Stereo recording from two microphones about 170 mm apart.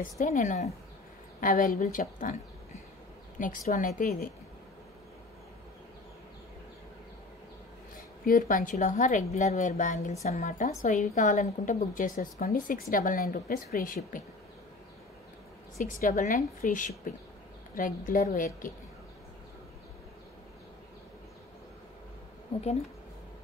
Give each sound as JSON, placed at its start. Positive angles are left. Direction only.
{"t": 0.0, "sound": "a woman's voice", "side_deg": 50}
{"t": 3.3, "sound": "a woman's voice", "side_deg": 50}
{"t": 8.3, "sound": "a woman's voice", "side_deg": 55}
{"t": 15.8, "sound": "a woman's voice", "side_deg": 45}
{"t": 22.5, "sound": "speech", "side_deg": 35}